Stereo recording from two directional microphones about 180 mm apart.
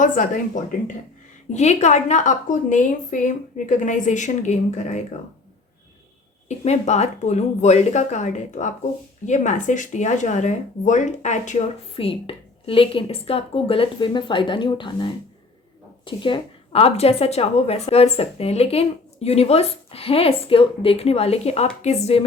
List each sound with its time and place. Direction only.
0.0 s a woman's voice: 45° left (ahead or behind)
6.7 s speech: 40° left (ahead or behind)